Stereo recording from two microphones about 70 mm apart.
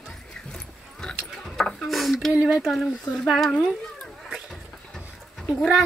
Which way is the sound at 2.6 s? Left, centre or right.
Centre.